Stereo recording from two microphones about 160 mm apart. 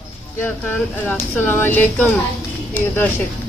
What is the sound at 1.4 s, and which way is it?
Speech, 10° left (ahead or behind).